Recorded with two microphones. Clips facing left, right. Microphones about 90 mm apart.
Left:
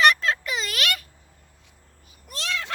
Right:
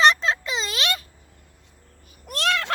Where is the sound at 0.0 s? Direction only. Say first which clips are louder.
Right 1 dB; 25° right (ahead or behind).